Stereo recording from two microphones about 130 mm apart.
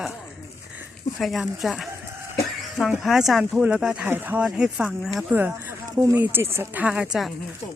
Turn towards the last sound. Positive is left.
turn(degrees=-5)  # may be behind; listen again after turning